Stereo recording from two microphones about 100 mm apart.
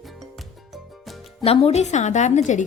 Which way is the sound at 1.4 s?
85° left.